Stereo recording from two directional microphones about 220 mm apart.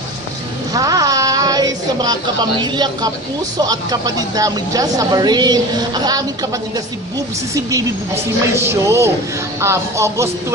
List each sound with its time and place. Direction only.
0.7 s a sound: 15° right (ahead or behind)
2.6 s speech: 20° right (ahead or behind)
7.5 s speech: 15° right (ahead or behind)